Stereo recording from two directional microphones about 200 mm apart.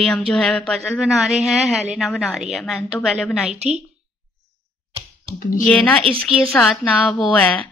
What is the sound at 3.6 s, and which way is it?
Speech, 35° right (ahead or behind).